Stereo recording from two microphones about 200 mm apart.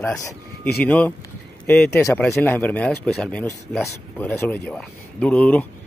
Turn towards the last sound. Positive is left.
turn(degrees=5)  # may be behind; listen again after turning